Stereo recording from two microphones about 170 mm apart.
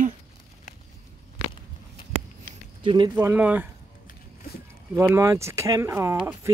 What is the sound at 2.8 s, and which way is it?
Speech, 30° right (ahead or behind).